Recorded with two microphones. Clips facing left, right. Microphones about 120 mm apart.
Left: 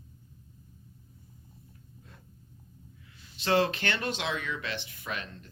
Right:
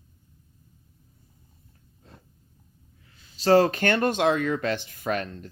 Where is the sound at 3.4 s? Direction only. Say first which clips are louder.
Right 8 dB; 40° right (ahead or behind).